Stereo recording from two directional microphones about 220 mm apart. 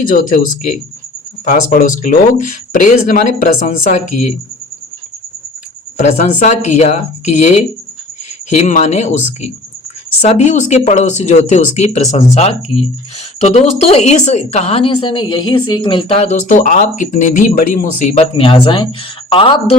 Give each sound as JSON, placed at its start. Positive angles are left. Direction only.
{"t": 0.1, "sound": "speech", "side_deg": 40}
{"t": 6.0, "sound": "speech", "side_deg": 30}